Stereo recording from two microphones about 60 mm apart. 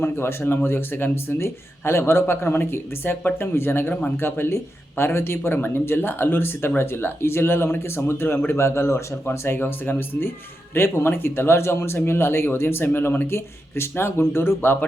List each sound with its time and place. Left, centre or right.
0.0 s speech: left